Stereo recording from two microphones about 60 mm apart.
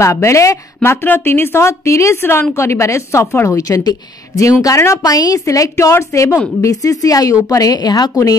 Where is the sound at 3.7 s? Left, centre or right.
Left.